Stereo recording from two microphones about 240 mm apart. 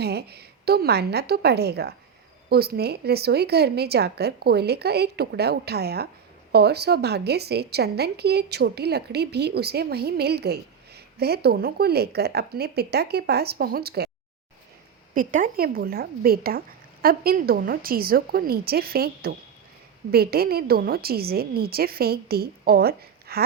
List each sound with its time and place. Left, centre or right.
0.0 s a woman's voice: right
15.1 s a woman's voice: right